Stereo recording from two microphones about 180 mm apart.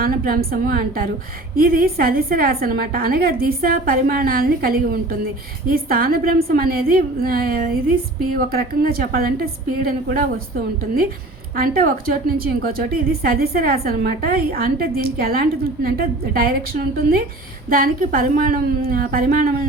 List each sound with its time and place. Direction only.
0.0 s a woman's voice: 55° right (ahead or behind)
11.5 s a woman's voice: 55° right (ahead or behind)